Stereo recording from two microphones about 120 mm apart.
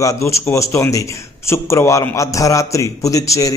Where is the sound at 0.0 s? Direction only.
25° left (ahead or behind).